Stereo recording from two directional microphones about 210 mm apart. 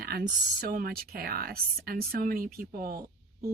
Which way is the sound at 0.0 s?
45° right (ahead or behind).